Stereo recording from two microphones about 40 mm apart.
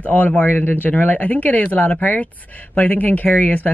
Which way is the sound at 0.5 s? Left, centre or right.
Left.